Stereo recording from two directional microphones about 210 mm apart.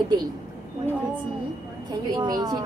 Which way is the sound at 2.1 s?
20° right (ahead or behind).